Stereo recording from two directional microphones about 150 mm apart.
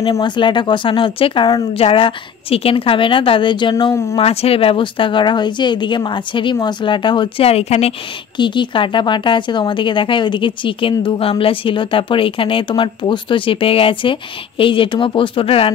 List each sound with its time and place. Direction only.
0.0 s speech: 30° left (ahead or behind)
4.2 s speech: 40° left (ahead or behind)
8.4 s speech: 30° left (ahead or behind)